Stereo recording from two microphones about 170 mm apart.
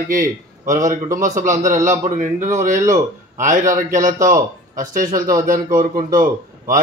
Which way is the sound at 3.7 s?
50° right (ahead or behind).